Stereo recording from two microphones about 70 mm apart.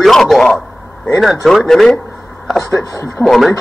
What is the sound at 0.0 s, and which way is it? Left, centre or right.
A man's voice, centre.